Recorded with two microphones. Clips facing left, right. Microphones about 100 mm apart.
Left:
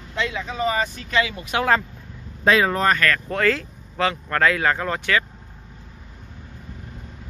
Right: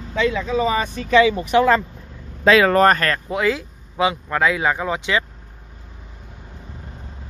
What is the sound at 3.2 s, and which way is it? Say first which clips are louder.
Speech: right 1 dB; 10° right (ahead or behind).